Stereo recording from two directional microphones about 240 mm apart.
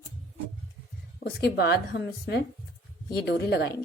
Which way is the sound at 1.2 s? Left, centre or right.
Left.